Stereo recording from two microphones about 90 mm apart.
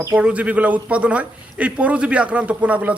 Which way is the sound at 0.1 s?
15° right (ahead or behind).